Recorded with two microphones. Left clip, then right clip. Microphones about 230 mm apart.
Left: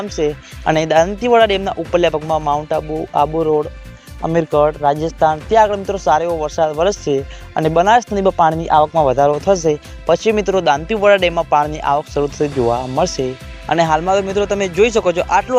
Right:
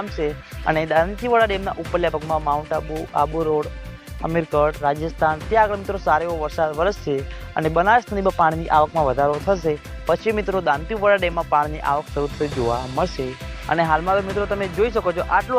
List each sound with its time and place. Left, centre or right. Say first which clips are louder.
0.2 s speech: left 8 dB; left